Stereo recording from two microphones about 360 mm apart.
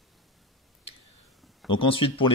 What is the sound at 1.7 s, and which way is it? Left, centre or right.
Speech, centre.